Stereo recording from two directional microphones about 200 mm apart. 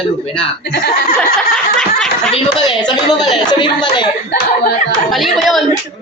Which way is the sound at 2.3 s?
20° left (ahead or behind).